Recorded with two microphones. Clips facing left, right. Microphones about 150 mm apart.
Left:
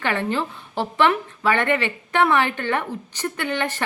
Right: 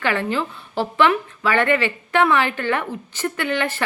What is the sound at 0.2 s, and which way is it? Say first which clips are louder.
A woman's voice: right 1 dB; 20° left (ahead or behind).